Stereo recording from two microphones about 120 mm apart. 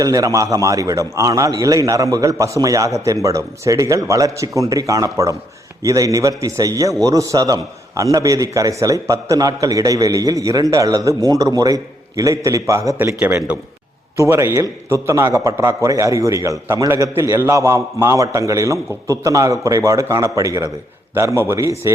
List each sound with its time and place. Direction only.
0.0 s a man's voice: 30° right (ahead or behind)
13.0 s a man's voice: 15° right (ahead or behind)
14.2 s a man's voice: 25° right (ahead or behind)